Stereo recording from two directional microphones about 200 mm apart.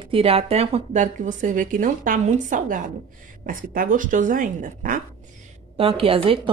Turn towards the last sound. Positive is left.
turn(degrees=-25)  # may be behind; listen again after turning